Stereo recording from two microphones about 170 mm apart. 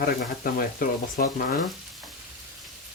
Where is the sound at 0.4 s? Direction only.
55° left (ahead or behind).